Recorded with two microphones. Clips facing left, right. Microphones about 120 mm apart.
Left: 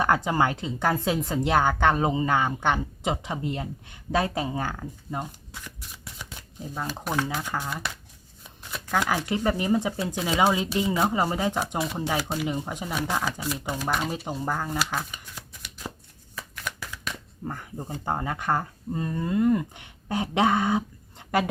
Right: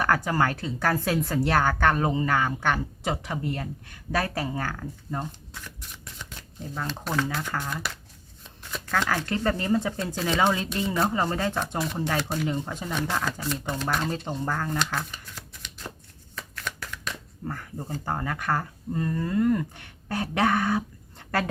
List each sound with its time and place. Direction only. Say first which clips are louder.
0.0 s a woman's voice: left 1 dB; 20° left (ahead or behind)
6.7 s speech: even; 15° left (ahead or behind)
16.3 s shuffling cards: even; 10° left (ahead or behind)
17.4 s speech: even; 15° left (ahead or behind)